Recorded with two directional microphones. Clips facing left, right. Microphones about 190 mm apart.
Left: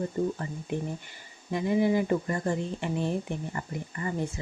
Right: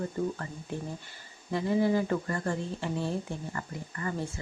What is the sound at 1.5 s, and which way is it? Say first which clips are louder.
Speech: left 1 dB; 15° left (ahead or behind).